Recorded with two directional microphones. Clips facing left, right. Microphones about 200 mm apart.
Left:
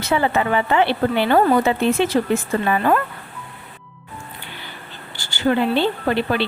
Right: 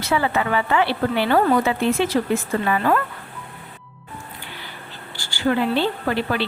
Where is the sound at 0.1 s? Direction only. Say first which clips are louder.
Left 2 dB; 25° left (ahead or behind).